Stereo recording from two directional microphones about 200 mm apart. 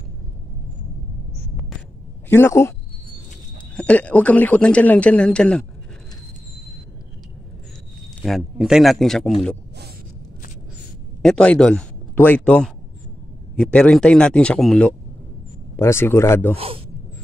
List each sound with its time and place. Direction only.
2.2 s speech: 10° left (ahead or behind)
3.7 s speech: 5° left (ahead or behind)
8.2 s speech: centre (ahead or behind)
11.2 s speech: 5° left (ahead or behind)
16.5 s speech: 30° right (ahead or behind)